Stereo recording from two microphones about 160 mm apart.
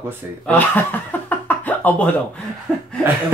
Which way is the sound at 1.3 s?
10° left (ahead or behind).